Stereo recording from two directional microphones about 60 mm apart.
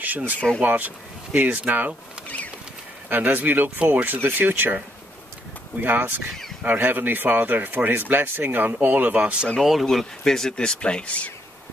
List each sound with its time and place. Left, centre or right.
0.6 s speech: right
3.1 s speech: right
5.8 s speech: right
9.6 s speech: centre